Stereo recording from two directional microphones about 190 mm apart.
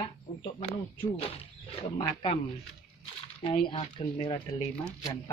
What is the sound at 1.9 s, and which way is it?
Speech, 25° left (ahead or behind).